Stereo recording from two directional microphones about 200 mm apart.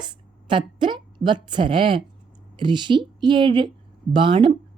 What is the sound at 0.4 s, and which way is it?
A woman's voice, 25° right (ahead or behind).